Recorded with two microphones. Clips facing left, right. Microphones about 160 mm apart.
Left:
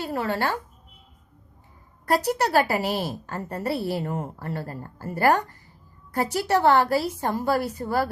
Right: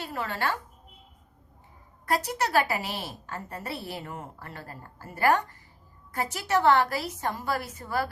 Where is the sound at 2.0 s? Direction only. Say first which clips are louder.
Left 5 dB; 35° left (ahead or behind).